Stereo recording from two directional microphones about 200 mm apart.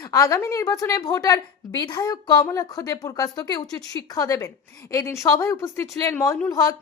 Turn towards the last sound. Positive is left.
turn(degrees=15)  # may be behind; listen again after turning